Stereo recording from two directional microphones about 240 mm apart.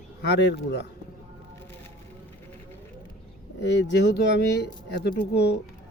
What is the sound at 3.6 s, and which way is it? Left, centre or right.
Speech, left.